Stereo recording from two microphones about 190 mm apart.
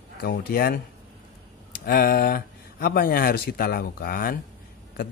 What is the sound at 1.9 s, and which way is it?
Speech, 55° left (ahead or behind).